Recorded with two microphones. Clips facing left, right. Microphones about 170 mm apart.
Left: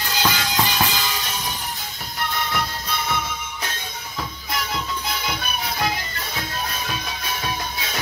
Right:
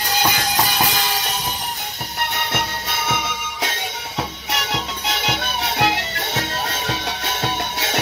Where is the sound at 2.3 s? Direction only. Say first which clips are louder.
Even; 80° right.